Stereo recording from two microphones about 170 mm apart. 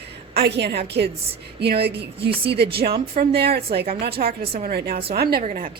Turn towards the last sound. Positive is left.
turn(degrees=-55)  # may be behind; listen again after turning